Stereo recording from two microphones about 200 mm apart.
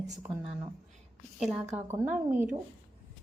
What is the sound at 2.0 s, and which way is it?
Speech, 10° right (ahead or behind).